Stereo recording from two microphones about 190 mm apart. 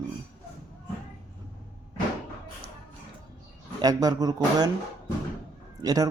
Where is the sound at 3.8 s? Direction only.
20° right (ahead or behind).